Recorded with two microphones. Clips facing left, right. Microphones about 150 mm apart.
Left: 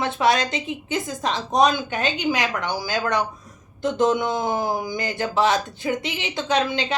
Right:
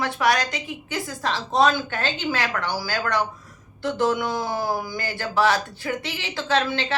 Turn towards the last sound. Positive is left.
turn(degrees=15)  # may be behind; listen again after turning